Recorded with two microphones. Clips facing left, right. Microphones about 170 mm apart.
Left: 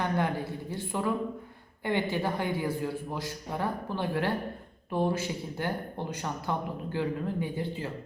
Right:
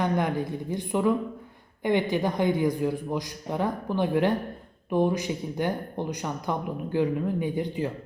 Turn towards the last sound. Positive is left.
turn(degrees=-15)  # may be behind; listen again after turning